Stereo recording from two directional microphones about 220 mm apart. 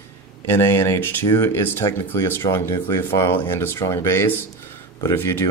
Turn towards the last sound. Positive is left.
turn(degrees=10)  # may be behind; listen again after turning